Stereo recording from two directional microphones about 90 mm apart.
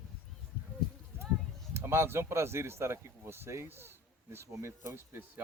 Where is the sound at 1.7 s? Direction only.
30° right (ahead or behind).